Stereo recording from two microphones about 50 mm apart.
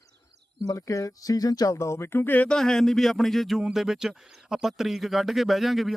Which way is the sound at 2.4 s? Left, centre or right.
Centre.